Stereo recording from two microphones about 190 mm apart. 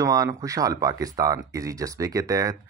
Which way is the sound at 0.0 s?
20° right (ahead or behind).